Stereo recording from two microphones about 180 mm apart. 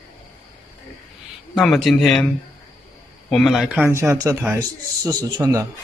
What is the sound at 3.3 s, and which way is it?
A man's voice, centre (ahead or behind).